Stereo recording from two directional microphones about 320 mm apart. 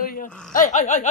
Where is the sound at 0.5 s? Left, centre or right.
Left.